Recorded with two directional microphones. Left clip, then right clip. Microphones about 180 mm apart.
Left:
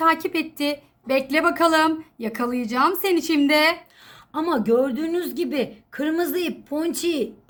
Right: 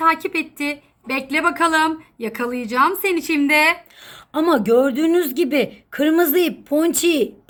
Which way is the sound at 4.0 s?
45° right (ahead or behind).